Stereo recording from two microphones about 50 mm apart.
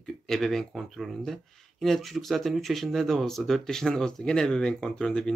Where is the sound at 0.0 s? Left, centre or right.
Centre.